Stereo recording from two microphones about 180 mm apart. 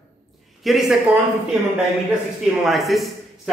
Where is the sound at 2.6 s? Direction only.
Centre (ahead or behind).